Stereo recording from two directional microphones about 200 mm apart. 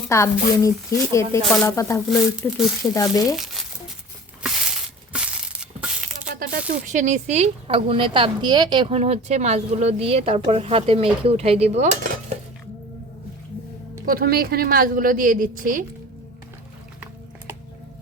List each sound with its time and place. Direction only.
0.1 s speech: 15° left (ahead or behind)
3.2 s speech: centre (ahead or behind)
4.4 s crushing: 5° right (ahead or behind)
6.3 s speech: 45° right (ahead or behind)
14.0 s a woman's voice: 45° right (ahead or behind)